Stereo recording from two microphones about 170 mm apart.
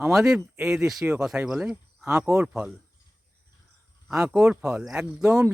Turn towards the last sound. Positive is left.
turn(degrees=-10)  # may be behind; listen again after turning